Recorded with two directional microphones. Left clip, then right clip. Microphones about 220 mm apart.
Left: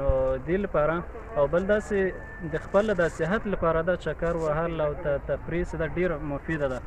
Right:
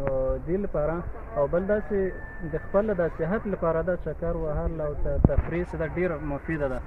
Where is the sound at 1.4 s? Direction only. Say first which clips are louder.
Left 1 dB; 5° right (ahead or behind).